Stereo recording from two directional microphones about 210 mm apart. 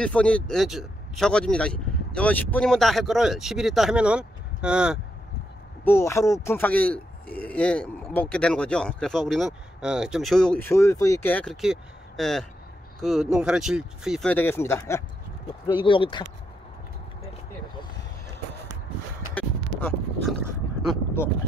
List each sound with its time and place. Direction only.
0.0 s a man's voice: 5° left (ahead or behind)
5.9 s a man's voice: 15° left (ahead or behind); by 14.3 s centre (ahead or behind)
14.3 s speech: 10° left (ahead or behind)
19.3 s a sound: 5° left (ahead or behind)